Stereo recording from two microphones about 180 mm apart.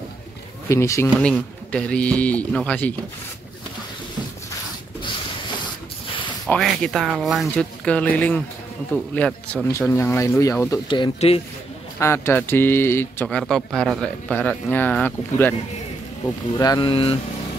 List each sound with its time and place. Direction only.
0.7 s speech: 15° left (ahead or behind)
6.4 s speech: centre (ahead or behind)
10.9 s speech: 30° left (ahead or behind)
12.0 s speech: 15° left (ahead or behind)
13.4 s speech: centre (ahead or behind)
16.5 s speech: 20° left (ahead or behind)